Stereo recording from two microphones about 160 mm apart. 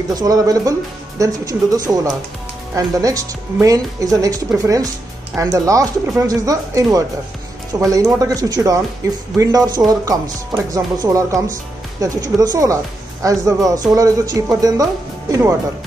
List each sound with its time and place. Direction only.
0.1 s speech: 25° right (ahead or behind)